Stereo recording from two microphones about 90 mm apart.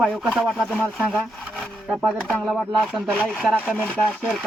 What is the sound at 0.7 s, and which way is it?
Speech, 15° left (ahead or behind).